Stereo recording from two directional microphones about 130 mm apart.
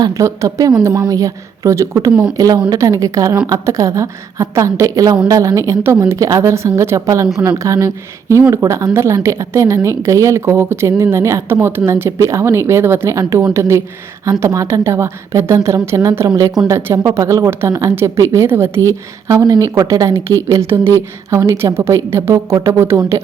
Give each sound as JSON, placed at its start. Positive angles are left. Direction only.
{"t": 0.0, "sound": "speech", "side_deg": -25}